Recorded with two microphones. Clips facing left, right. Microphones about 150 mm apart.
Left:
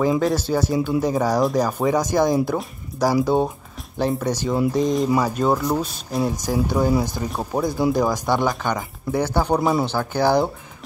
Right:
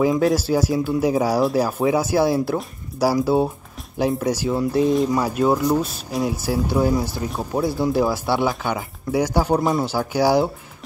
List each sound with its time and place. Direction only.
0.2 s speech: 10° right (ahead or behind)